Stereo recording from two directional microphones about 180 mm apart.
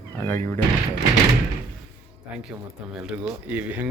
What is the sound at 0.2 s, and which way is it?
Speech, 15° left (ahead or behind).